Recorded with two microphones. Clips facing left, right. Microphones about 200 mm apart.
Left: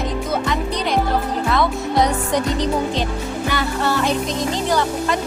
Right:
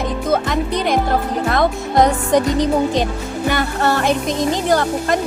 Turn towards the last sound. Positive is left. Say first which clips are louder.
# right 2 dB
turn(degrees=-50)  # may be behind; listen again after turning